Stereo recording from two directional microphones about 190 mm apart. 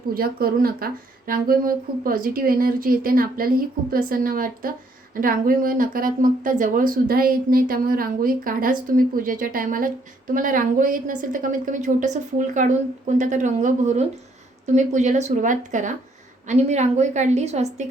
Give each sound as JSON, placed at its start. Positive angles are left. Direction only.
{"t": 0.1, "sound": "a woman's voice", "side_deg": -50}